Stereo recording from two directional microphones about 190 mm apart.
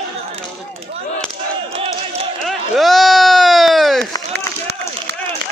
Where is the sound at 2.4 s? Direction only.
Centre (ahead or behind).